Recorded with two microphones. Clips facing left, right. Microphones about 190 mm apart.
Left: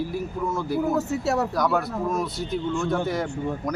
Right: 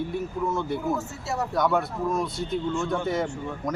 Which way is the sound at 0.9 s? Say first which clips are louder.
Left 6 dB; 65° left (ahead or behind).